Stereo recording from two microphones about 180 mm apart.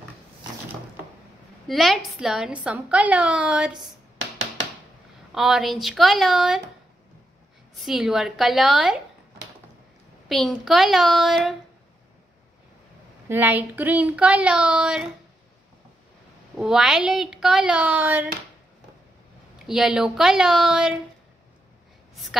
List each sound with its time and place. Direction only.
1.7 s a woman's voice: centre (ahead or behind)
5.3 s a woman's voice: centre (ahead or behind)
7.8 s a woman's voice: centre (ahead or behind)
10.2 s a woman's voice: centre (ahead or behind)
13.3 s speech: 10° right (ahead or behind)
16.5 s a woman's voice: centre (ahead or behind)
19.6 s a woman's voice: centre (ahead or behind)
22.1 s a sound: centre (ahead or behind)